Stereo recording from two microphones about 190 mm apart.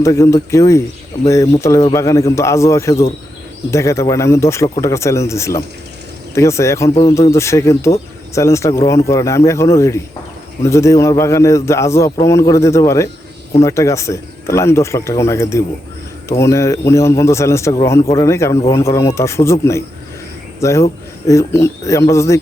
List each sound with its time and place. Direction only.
0.0 s a man's voice: 15° left (ahead or behind)